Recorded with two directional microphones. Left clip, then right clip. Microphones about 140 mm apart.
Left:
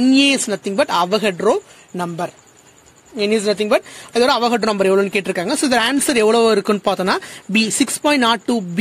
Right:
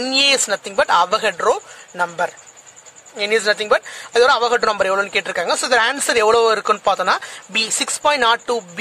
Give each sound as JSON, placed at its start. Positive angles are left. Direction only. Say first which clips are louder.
{"t": 0.0, "sound": "speech", "louder": "left 1 dB", "side_deg": 15}